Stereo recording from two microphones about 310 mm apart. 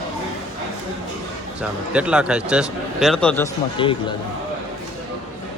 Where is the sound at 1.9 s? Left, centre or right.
Centre.